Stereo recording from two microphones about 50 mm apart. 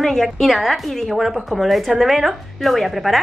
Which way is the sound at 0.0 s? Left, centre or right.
Centre.